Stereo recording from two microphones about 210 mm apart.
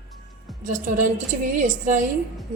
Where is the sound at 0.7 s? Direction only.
35° right (ahead or behind).